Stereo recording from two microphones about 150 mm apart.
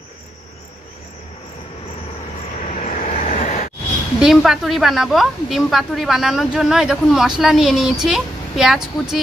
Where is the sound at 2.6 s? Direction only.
50° left (ahead or behind).